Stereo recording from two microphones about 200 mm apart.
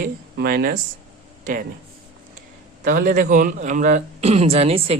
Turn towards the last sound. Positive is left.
turn(degrees=-30)  # may be behind; listen again after turning